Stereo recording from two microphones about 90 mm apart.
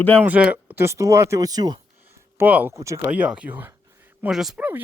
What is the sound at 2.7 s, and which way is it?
Speech, 35° right (ahead or behind).